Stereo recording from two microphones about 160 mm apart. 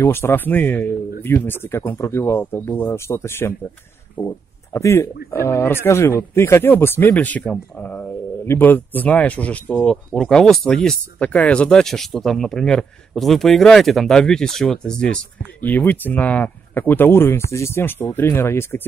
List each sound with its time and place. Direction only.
0.0 s speech: 15° left (ahead or behind)
4.2 s speech: 30° left (ahead or behind)
4.7 s speech: 15° left (ahead or behind)